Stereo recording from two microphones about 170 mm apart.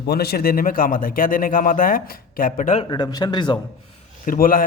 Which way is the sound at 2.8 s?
25° left (ahead or behind).